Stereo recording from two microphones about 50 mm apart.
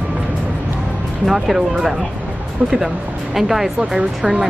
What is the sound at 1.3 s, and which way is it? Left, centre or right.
Speech, centre.